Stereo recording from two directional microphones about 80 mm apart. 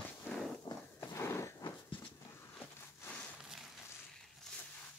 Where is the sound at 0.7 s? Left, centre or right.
Left.